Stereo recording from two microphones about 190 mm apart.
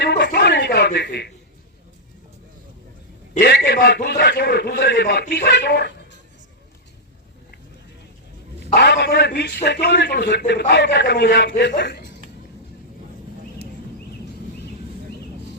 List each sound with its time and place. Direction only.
0.0 s a sound: 60° left (ahead or behind)
3.4 s a man's voice: 60° left (ahead or behind)
8.7 s a man's voice: 60° left (ahead or behind)